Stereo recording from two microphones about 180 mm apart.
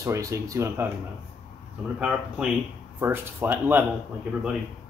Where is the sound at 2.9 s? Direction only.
10° right (ahead or behind).